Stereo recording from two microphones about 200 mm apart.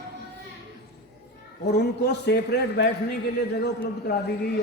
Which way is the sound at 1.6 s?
55° left (ahead or behind).